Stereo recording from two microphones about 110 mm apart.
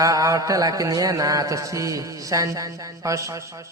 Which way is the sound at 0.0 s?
30° right (ahead or behind).